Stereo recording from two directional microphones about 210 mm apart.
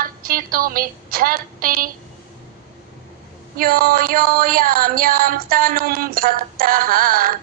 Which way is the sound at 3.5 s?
45° right (ahead or behind).